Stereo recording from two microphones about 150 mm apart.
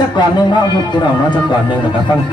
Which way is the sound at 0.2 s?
30° left (ahead or behind).